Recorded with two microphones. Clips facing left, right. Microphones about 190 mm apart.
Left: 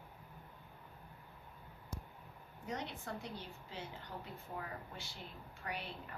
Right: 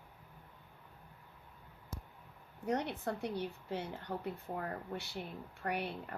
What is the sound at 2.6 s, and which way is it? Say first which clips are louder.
Speech: right 8 dB; 65° right (ahead or behind).